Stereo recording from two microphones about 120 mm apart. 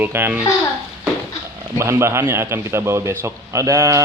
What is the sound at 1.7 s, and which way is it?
A man's voice, 20° right (ahead or behind).